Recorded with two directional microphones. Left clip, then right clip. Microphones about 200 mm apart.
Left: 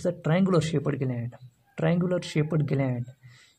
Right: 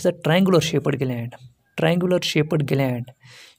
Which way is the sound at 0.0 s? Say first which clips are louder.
Right 7 dB; 35° right (ahead or behind).